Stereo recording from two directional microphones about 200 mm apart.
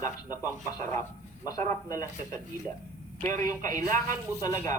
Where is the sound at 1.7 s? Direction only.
15° left (ahead or behind).